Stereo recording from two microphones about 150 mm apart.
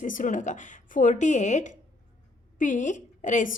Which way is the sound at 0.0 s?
60° left (ahead or behind).